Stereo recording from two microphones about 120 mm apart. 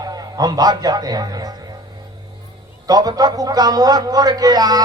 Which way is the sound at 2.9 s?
30° right (ahead or behind).